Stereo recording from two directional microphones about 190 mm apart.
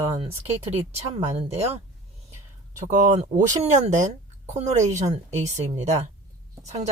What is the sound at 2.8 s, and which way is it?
Speech, 40° right (ahead or behind).